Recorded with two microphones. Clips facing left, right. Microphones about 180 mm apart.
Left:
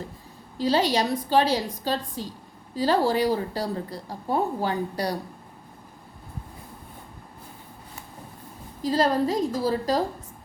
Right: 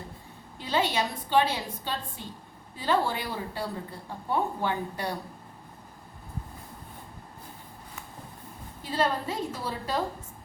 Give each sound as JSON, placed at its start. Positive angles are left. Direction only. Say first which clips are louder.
{"t": 0.6, "sound": "a woman's voice", "louder": "left 5 dB", "side_deg": 40}
{"t": 8.8, "sound": "a woman's voice", "louder": "left 6 dB", "side_deg": 35}